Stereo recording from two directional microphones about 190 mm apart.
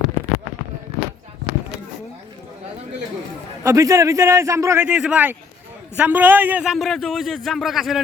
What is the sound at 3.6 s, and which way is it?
A man's voice, 15° right (ahead or behind).